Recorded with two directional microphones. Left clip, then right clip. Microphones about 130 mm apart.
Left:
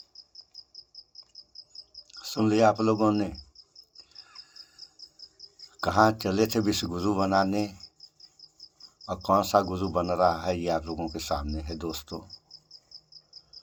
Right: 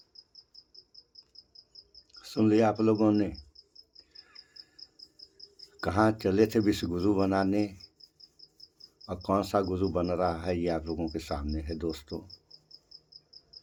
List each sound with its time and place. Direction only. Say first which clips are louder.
2.1 s speech: left 1 dB; 20° right (ahead or behind)
3.9 s a sound: left 5 dB; 20° right (ahead or behind)
5.7 s speech: left 4 dB; 20° right (ahead or behind)
9.0 s speech: left 5 dB; 15° right (ahead or behind)